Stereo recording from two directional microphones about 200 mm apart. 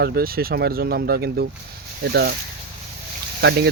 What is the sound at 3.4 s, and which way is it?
Speech, 60° right (ahead or behind).